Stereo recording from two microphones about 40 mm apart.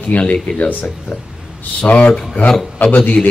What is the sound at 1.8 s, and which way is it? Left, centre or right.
Speech, left.